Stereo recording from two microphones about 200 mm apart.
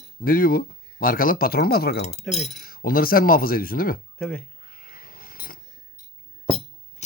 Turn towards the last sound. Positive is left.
turn(degrees=35)  # may be behind; listen again after turning